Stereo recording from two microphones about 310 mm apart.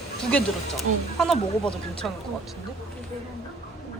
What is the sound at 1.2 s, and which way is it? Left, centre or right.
Speech, centre.